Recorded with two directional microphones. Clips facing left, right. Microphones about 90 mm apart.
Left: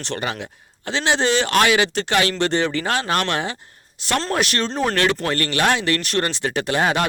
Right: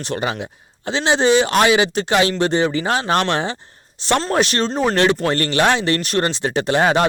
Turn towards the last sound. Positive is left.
turn(degrees=-20)  # may be behind; listen again after turning